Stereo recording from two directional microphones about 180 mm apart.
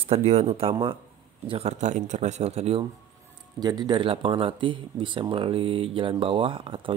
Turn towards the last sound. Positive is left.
turn(degrees=-30)  # may be behind; listen again after turning